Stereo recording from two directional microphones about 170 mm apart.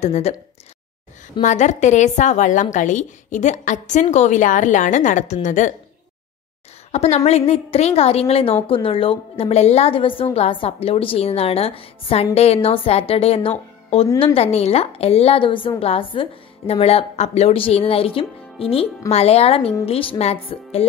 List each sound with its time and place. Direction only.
0.0 s a woman's voice: 40° left (ahead or behind)
1.4 s a woman's voice: 45° left (ahead or behind)
6.9 s a woman's voice: 40° left (ahead or behind)